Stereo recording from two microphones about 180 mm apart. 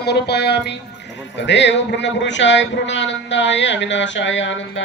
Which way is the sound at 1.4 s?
80° left.